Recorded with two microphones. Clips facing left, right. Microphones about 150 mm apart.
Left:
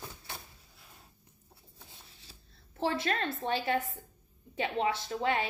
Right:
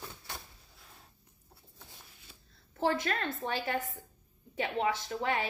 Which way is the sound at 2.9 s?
30° left (ahead or behind).